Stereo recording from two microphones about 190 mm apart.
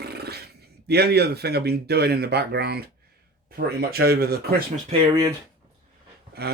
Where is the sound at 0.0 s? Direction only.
55° right (ahead or behind).